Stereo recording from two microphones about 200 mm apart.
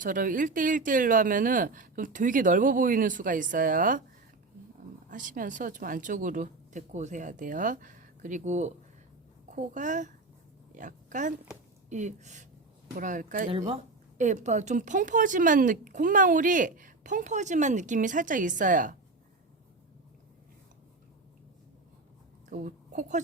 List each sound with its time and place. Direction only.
0.0 s speech: 40° right (ahead or behind)
5.1 s speech: 40° right (ahead or behind)
13.5 s speech: 25° right (ahead or behind)
14.2 s speech: 40° right (ahead or behind)
22.4 s a woman's voice: 40° right (ahead or behind)